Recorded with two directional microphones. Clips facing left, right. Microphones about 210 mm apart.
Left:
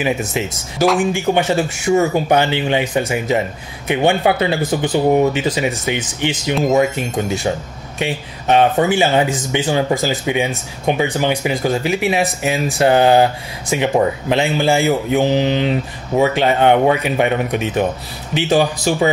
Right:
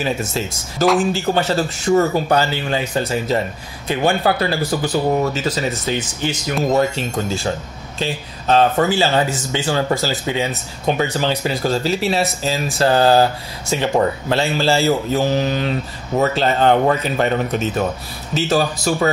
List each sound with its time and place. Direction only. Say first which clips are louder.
0.0 s speech: left 2 dB; 15° left (ahead or behind)